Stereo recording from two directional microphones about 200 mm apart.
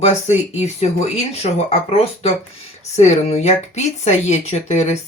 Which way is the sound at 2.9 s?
35° left (ahead or behind).